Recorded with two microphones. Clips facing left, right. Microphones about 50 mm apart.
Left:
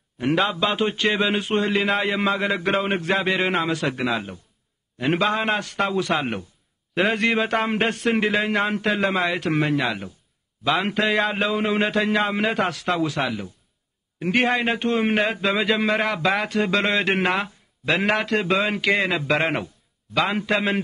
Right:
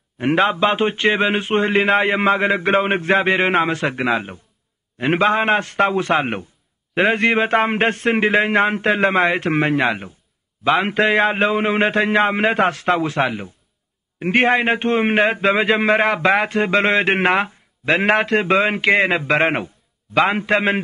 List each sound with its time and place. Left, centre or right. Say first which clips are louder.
0.2 s a man's voice: right 5 dB; right